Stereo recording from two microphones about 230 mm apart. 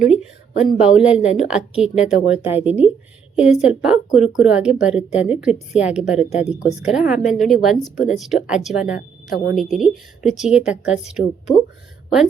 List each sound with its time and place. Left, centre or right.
0.0 s a woman's voice: centre
9.0 s speech: left
9.6 s a woman's voice: centre